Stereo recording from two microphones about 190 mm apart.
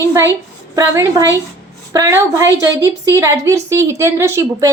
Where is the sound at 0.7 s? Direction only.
15° right (ahead or behind).